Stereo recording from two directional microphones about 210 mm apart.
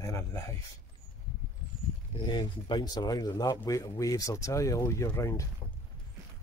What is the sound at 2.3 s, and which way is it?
Speech, 20° left (ahead or behind).